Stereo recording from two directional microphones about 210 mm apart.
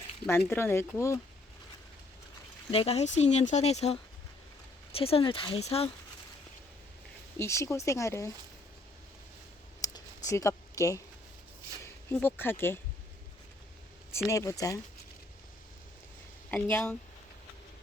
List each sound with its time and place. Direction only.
0.3 s speech: 10° left (ahead or behind)
2.6 s speech: 30° left (ahead or behind)
7.3 s speech: 15° left (ahead or behind)
9.8 s a sound: 15° left (ahead or behind)
11.8 s speech: 10° left (ahead or behind)
14.3 s speech: 15° left (ahead or behind)
16.5 s speech: 10° left (ahead or behind)